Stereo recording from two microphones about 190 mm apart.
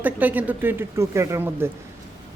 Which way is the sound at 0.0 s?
10° right (ahead or behind).